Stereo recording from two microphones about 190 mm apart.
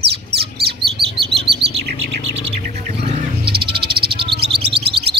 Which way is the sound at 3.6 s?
25° right (ahead or behind).